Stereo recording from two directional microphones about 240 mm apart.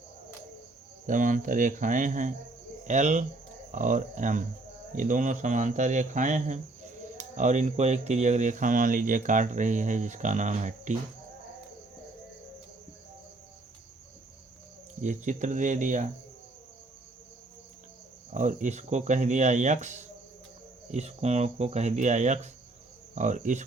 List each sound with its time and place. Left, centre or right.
1.0 s speech: right
15.0 s speech: right
18.3 s speech: right